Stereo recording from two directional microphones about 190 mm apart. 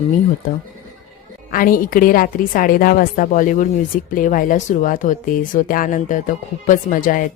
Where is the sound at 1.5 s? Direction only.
45° left (ahead or behind).